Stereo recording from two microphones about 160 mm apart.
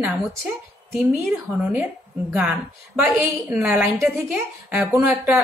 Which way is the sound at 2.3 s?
5° right (ahead or behind).